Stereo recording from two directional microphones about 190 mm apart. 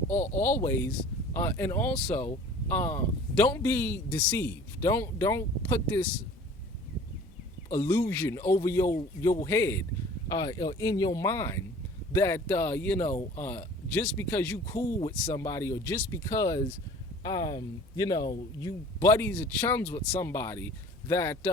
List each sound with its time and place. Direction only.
0.1 s speech: 10° left (ahead or behind)
7.9 s speech: 15° left (ahead or behind)